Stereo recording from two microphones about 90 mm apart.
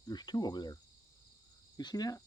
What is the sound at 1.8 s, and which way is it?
Speech, 50° left (ahead or behind).